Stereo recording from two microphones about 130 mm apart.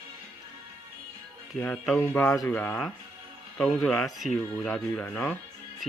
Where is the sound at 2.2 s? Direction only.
25° left (ahead or behind).